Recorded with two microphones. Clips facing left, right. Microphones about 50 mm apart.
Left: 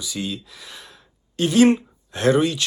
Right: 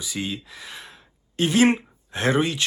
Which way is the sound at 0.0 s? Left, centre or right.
Right.